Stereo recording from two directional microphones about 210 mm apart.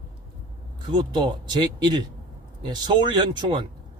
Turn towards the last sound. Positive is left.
turn(degrees=-20)  # may be behind; listen again after turning